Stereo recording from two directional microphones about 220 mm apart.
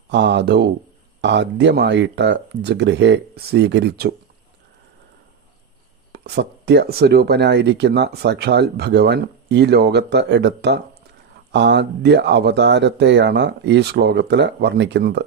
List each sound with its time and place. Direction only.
0.1 s speech: 55° right (ahead or behind)
6.1 s speech: 45° right (ahead or behind)